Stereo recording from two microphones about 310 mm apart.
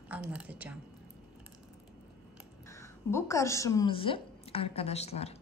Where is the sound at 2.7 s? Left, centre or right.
Centre.